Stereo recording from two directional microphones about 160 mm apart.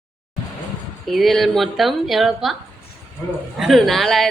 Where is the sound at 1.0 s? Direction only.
Centre (ahead or behind).